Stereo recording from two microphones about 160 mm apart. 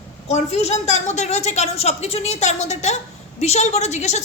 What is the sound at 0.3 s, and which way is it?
A woman's voice, 45° left (ahead or behind).